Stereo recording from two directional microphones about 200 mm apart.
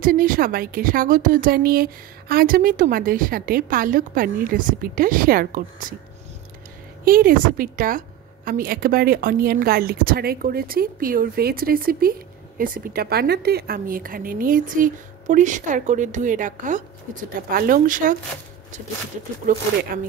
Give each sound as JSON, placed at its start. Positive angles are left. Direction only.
{"t": 0.0, "sound": "a woman's voice", "side_deg": -45}
{"t": 7.1, "sound": "a woman's voice", "side_deg": -45}
{"t": 19.4, "sound": "a woman's voice", "side_deg": -45}